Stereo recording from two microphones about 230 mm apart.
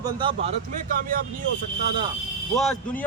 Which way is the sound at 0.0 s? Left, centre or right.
Right.